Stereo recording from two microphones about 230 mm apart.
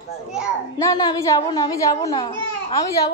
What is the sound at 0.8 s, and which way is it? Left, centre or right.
A child's voice, centre.